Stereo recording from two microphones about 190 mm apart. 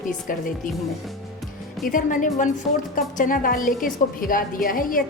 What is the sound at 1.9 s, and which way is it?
A woman's voice, 45° left (ahead or behind).